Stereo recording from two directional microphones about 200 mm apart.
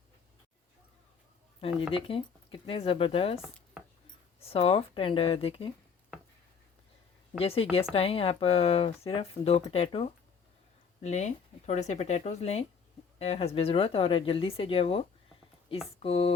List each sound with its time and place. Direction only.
1.9 s speech: 25° left (ahead or behind)
7.3 s speech: 30° left (ahead or behind)